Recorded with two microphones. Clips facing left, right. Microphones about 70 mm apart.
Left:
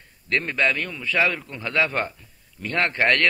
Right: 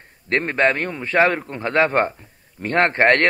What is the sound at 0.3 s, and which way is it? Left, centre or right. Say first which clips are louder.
A man's voice: right 4 dB; right.